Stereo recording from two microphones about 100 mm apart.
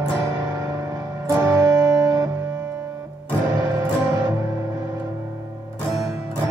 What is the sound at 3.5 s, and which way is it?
Music, 35° right (ahead or behind).